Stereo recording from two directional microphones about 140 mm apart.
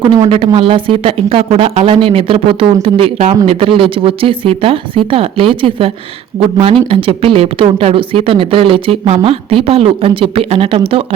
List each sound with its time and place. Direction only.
0.0 s speech: 40° right (ahead or behind)
6.9 s speech: 45° right (ahead or behind)